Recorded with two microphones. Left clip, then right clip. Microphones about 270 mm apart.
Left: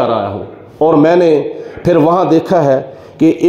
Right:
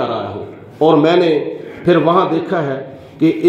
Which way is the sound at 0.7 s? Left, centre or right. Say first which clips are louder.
Left 2 dB; left.